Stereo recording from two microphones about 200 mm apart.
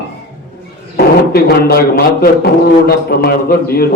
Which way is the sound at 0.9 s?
50° left (ahead or behind).